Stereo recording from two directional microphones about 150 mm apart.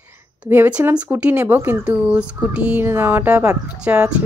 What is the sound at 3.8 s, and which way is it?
Speech, 5° right (ahead or behind).